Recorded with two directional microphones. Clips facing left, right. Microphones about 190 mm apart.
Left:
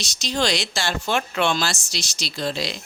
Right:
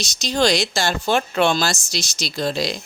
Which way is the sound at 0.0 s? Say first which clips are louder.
Right 4 dB; 40° right (ahead or behind).